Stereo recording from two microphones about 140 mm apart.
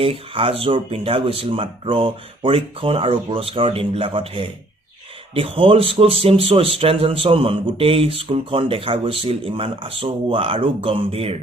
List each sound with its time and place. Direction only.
0.0 s speech: 40° right (ahead or behind)